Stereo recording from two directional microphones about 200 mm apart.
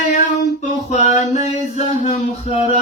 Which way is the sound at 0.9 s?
35° left (ahead or behind).